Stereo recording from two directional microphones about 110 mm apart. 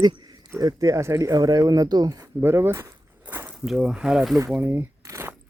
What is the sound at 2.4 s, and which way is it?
Speech, 20° right (ahead or behind).